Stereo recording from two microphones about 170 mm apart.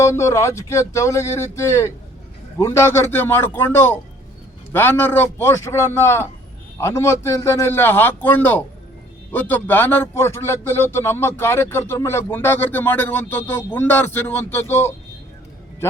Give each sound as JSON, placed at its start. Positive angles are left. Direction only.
{"t": 0.0, "sound": "a man's voice", "side_deg": 15}